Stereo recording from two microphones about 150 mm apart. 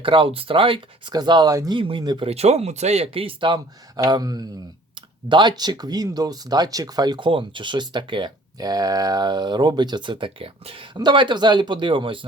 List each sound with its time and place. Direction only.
0.0 s speech: 35° right (ahead or behind)